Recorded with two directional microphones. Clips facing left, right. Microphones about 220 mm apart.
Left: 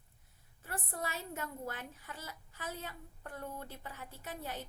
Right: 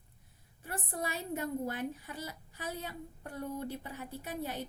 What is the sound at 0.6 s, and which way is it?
A woman's voice, 15° right (ahead or behind).